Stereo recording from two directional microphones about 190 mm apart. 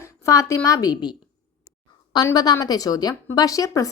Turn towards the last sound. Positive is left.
turn(degrees=15)  # may be behind; listen again after turning